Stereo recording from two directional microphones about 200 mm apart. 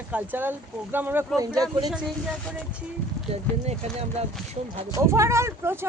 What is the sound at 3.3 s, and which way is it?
Speech, 30° right (ahead or behind).